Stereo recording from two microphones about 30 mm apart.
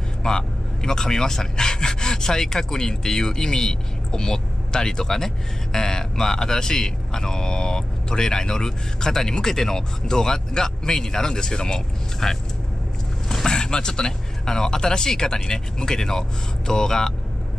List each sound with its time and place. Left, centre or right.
0.2 s speech: left
13.5 s speech: left